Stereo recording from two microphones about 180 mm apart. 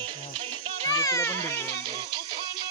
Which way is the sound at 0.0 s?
30° right (ahead or behind).